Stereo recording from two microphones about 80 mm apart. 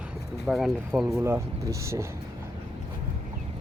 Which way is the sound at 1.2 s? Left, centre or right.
Right.